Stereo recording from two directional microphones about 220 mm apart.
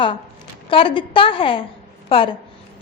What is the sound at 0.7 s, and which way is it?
A woman's voice, 25° left (ahead or behind).